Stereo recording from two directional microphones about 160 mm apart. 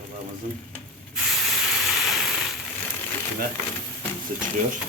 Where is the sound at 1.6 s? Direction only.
Centre (ahead or behind).